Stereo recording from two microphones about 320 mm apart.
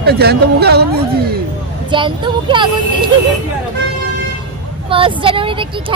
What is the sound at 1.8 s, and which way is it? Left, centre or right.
Speech, centre.